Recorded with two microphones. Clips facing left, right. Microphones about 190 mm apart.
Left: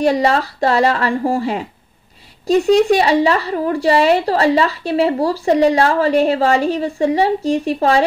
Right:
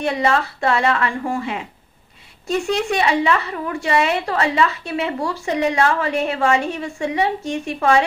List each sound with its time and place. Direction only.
0.0 s a woman's voice: 35° left (ahead or behind)